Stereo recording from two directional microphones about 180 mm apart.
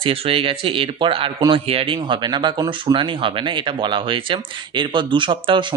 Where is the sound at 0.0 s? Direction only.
30° right (ahead or behind).